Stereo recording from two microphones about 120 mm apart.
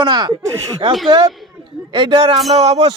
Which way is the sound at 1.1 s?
40° right (ahead or behind).